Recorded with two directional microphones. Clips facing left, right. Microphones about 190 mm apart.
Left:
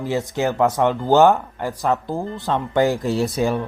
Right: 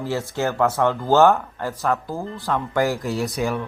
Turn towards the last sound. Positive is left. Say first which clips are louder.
# left 4 dB
turn(degrees=30)  # may be behind; listen again after turning